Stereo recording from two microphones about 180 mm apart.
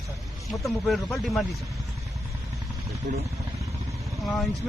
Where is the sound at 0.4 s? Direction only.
Centre (ahead or behind).